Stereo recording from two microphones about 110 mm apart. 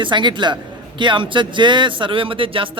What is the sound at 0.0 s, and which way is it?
A man's voice, 45° right (ahead or behind).